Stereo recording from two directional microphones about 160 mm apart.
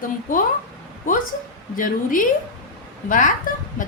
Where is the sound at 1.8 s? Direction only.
55° left (ahead or behind).